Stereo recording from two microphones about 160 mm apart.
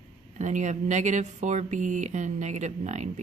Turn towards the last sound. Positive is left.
turn(degrees=-45)  # may be behind; listen again after turning